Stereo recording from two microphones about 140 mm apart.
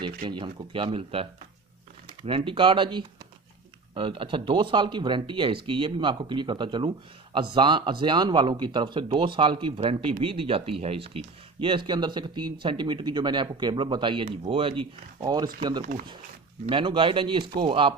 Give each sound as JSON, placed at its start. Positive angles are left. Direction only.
{"t": 0.0, "sound": "speech", "side_deg": -35}